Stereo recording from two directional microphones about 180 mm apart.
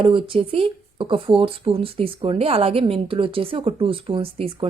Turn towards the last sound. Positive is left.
turn(degrees=-30)  # may be behind; listen again after turning